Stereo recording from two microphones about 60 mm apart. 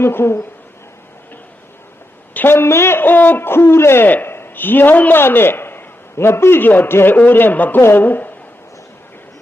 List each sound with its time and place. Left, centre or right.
0.0 s a woman's voice: left
2.3 s a man's voice: left